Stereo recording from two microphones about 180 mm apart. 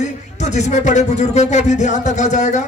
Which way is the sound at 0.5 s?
40° left (ahead or behind).